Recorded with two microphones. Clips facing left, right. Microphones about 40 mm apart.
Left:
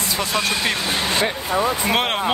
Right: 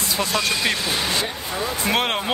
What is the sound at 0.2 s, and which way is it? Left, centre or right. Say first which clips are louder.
Speech: even; centre.